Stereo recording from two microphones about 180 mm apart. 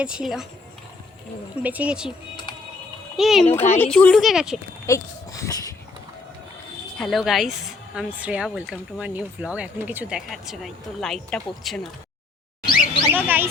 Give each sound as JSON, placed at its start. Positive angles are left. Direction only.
{"t": 0.0, "sound": "speech", "side_deg": -5}
{"t": 1.6, "sound": "speech", "side_deg": -10}
{"t": 3.2, "sound": "speech", "side_deg": 0}
{"t": 4.9, "sound": "a sound", "side_deg": 15}
{"t": 7.0, "sound": "speech", "side_deg": 0}
{"t": 12.6, "sound": "a sound", "side_deg": 50}
{"t": 13.1, "sound": "speech", "side_deg": -10}